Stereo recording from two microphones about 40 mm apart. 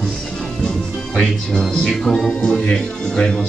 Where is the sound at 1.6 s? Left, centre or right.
Centre.